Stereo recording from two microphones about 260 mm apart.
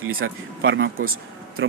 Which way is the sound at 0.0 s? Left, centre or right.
Right.